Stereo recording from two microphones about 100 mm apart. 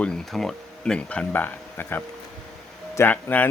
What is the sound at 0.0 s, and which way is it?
Speech, 5° left (ahead or behind).